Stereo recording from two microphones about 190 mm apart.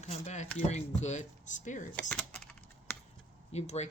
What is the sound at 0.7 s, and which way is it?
Speech, 35° left (ahead or behind).